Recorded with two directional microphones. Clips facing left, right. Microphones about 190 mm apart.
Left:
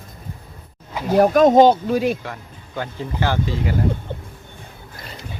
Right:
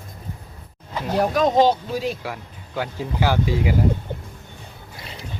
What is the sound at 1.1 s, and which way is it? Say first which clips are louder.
Speech: left 6 dB; 50° left (ahead or behind).